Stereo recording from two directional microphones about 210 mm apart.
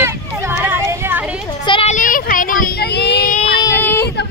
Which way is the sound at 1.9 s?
40° left (ahead or behind).